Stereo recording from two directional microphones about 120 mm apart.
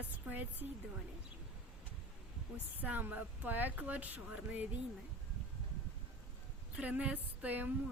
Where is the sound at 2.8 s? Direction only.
15° right (ahead or behind).